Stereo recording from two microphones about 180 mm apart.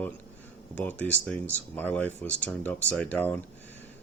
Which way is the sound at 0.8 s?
10° left (ahead or behind).